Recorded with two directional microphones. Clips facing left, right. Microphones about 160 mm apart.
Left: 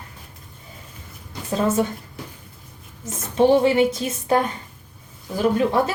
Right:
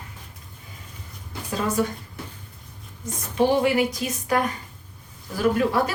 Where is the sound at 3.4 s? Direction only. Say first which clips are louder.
Left 4 dB; 25° left (ahead or behind).